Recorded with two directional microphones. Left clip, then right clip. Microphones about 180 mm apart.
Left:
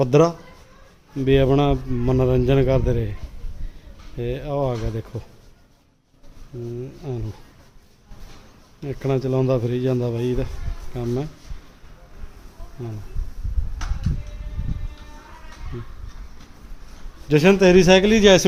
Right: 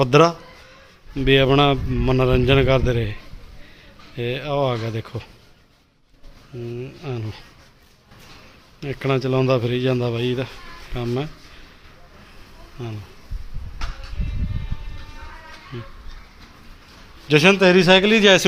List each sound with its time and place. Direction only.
0.0 s a man's voice: 10° left (ahead or behind)
4.2 s a man's voice: 10° left (ahead or behind)
6.7 s a man's voice: 10° left (ahead or behind)
8.8 s a man's voice: 5° left (ahead or behind)
17.2 s a man's voice: 10° left (ahead or behind)
17.6 s a man's voice: 25° left (ahead or behind)